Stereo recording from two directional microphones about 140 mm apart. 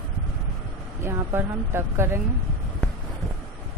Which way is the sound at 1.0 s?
15° right (ahead or behind).